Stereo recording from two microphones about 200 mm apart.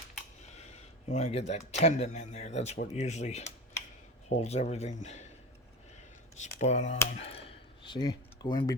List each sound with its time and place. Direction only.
0.5 s speech: 35° left (ahead or behind)
6.4 s speech: 35° left (ahead or behind)
7.3 s a sound: 30° left (ahead or behind)